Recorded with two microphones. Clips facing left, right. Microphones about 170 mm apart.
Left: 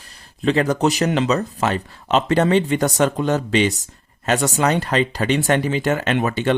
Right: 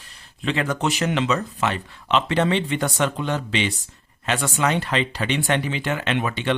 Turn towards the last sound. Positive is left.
turn(degrees=45)  # may be behind; listen again after turning